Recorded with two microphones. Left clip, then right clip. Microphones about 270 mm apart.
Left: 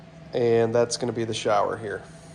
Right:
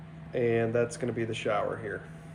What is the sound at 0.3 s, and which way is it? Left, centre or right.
Speech, left.